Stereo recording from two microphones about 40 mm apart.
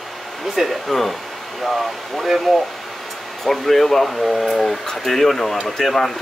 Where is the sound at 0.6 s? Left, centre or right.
Centre.